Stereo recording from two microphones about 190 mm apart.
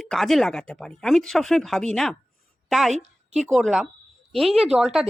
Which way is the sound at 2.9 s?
35° right (ahead or behind).